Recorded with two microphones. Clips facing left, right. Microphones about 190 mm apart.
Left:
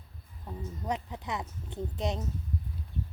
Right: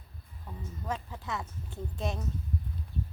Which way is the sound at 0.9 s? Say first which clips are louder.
Left 2 dB; 20° left (ahead or behind).